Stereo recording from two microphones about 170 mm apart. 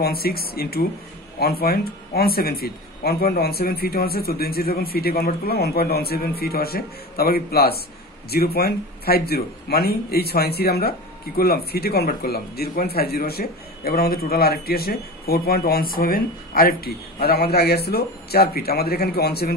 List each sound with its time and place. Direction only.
0.0 s speech: 65° left (ahead or behind)